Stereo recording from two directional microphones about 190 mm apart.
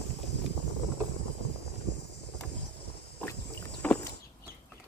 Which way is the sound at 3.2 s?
10° left (ahead or behind).